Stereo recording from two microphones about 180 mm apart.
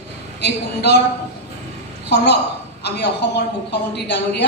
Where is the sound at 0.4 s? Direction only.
65° left (ahead or behind).